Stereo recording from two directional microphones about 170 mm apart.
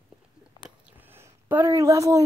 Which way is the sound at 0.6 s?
10° right (ahead or behind).